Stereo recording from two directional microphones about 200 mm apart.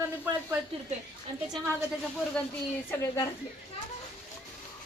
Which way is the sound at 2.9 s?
10° left (ahead or behind).